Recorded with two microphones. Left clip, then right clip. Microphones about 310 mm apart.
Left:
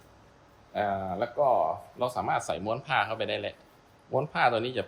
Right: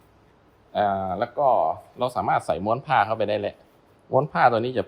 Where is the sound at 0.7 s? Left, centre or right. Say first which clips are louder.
Right 6 dB; centre.